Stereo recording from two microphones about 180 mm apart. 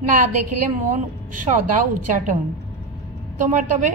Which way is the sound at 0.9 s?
45° right (ahead or behind).